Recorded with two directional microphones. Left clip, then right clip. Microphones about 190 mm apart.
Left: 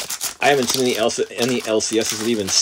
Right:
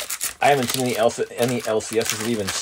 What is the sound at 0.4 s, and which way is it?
Speech, 15° left (ahead or behind).